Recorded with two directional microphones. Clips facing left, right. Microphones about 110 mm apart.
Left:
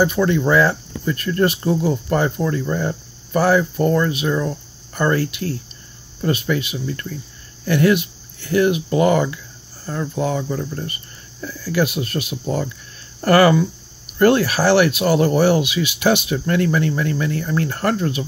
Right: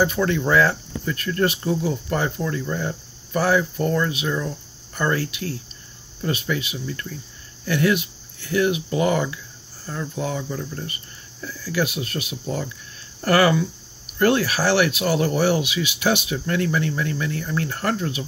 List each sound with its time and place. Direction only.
0.0 s speech: 10° left (ahead or behind)
1.4 s speech: 45° left (ahead or behind)